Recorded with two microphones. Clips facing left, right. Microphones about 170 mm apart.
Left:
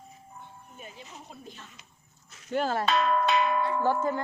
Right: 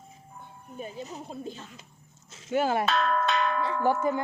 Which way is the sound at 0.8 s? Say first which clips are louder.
Right 9 dB; 35° right (ahead or behind).